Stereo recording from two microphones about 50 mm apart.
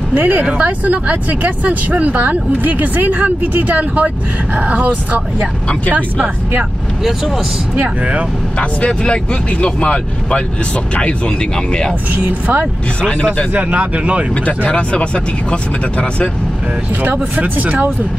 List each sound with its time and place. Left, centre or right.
0.1 s speech: right
7.7 s speech: right
8.5 s speech: left
12.1 s speech: right
14.3 s speech: left
17.0 s speech: right